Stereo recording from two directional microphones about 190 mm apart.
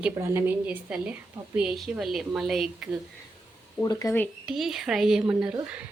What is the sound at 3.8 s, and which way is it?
Speech, 20° left (ahead or behind).